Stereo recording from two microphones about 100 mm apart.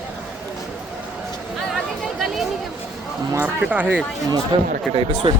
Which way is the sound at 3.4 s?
15° right (ahead or behind).